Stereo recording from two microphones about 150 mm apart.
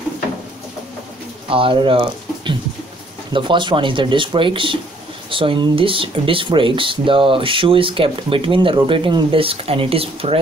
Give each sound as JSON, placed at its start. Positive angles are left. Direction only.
{"t": 1.5, "sound": "speech", "side_deg": -35}